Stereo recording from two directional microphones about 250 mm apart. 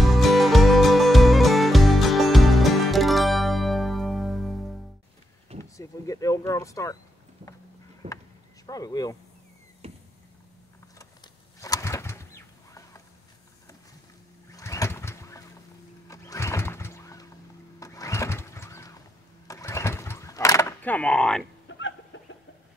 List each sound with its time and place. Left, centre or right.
0.0 s music: centre
5.6 s a sound: centre
8.0 s speech: right
8.6 s speech: centre
9.8 s a sound: right
11.0 s bird: centre
14.5 s vehicle: centre
16.1 s music: centre
19.4 s vehicle: centre
21.6 s chicken: left